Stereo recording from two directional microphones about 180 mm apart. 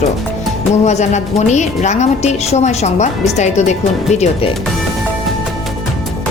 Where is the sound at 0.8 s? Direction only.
40° left (ahead or behind).